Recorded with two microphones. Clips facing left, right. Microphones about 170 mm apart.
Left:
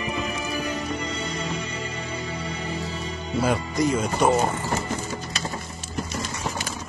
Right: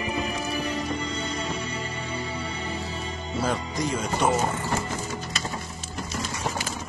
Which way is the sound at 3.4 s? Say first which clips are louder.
Left 5 dB; 10° left (ahead or behind).